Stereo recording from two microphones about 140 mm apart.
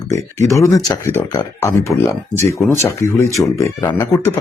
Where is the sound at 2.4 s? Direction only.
20° left (ahead or behind).